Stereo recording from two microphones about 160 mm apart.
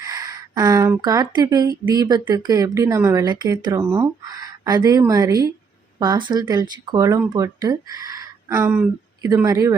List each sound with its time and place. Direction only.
0.0 s speech: 25° right (ahead or behind)